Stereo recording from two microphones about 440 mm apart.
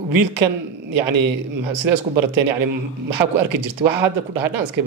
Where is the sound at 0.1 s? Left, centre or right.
Right.